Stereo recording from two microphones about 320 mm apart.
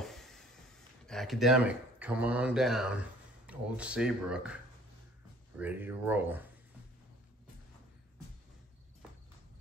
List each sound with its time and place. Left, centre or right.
0.0 s a sound: centre
1.0 s speech: centre
5.6 s speech: centre